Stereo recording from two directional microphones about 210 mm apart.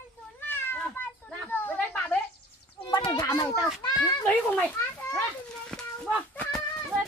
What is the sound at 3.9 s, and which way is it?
Children playing, 15° left (ahead or behind).